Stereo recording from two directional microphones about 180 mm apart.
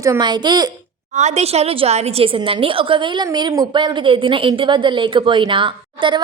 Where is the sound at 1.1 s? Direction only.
40° right (ahead or behind).